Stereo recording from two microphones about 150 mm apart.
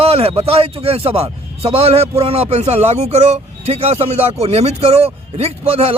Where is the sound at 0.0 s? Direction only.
40° right (ahead or behind).